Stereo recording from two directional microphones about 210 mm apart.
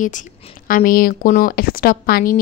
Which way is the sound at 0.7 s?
40° left (ahead or behind).